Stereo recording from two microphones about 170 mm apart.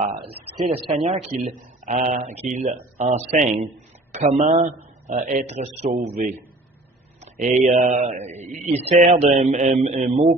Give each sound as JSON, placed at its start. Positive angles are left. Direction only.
{"t": 0.0, "sound": "a man's voice", "side_deg": -35}